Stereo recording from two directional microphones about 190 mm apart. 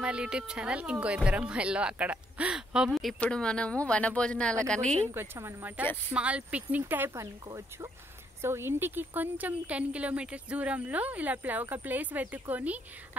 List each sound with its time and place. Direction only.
0.0 s speech: 5° right (ahead or behind)
5.1 s a woman's voice: 10° right (ahead or behind)